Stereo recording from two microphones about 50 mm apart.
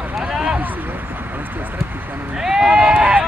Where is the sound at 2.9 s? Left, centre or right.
Right.